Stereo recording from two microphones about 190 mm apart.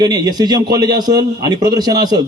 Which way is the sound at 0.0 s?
20° right (ahead or behind).